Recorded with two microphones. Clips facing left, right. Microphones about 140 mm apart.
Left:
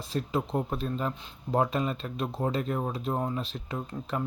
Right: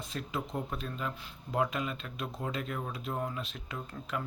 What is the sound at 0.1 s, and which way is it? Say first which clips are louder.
Speech: left 8 dB; 35° left (ahead or behind).